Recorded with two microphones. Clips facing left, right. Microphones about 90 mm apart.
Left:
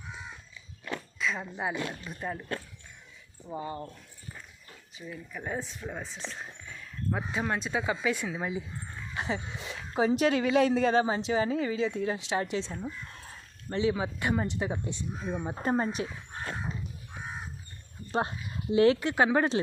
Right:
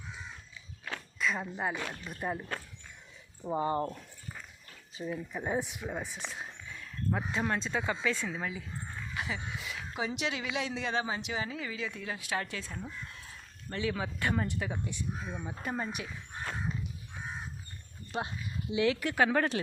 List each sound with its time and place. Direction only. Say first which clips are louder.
1.2 s speech: even; centre (ahead or behind)
3.4 s speech: right 6 dB; 40° right (ahead or behind)
4.9 s speech: right 5 dB; 30° right (ahead or behind)
5.4 s speech: right 1 dB; 15° right (ahead or behind); by 8.6 s 20° left (ahead or behind)
9.1 s speech: left 5 dB; 30° left (ahead or behind)
13.1 s a sound: left 2 dB; 40° left (ahead or behind)
13.7 s speech: left 6 dB; 20° left (ahead or behind)
18.7 s speech: left 7 dB; 40° left (ahead or behind)
18.9 s speech: left 3 dB; 25° left (ahead or behind)